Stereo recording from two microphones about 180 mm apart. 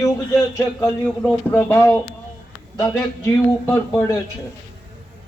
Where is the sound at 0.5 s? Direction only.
15° left (ahead or behind).